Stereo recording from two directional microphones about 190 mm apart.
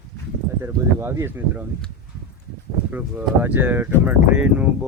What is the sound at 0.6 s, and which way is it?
Speech, 15° right (ahead or behind).